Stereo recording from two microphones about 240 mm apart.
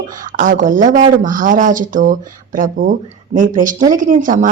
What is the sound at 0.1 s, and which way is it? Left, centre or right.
A woman's voice, right.